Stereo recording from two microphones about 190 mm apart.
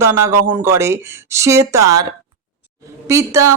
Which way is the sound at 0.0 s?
15° right (ahead or behind).